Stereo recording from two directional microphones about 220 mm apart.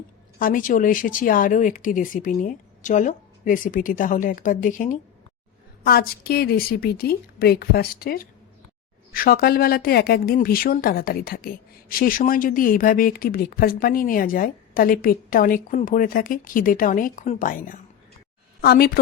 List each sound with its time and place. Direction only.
0.3 s a woman's voice: 40° left (ahead or behind)